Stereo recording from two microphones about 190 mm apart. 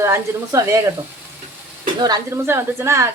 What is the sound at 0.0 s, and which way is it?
Speech, 15° right (ahead or behind).